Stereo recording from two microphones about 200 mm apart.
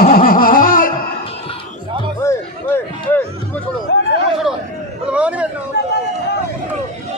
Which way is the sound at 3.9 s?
65° left (ahead or behind).